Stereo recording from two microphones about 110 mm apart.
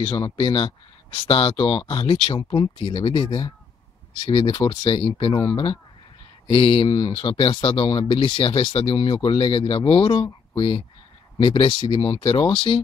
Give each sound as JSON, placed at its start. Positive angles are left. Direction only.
{"t": 0.0, "sound": "speech", "side_deg": 50}